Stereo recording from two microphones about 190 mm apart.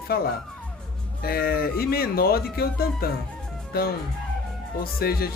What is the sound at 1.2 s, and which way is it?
Speech, 55° left (ahead or behind).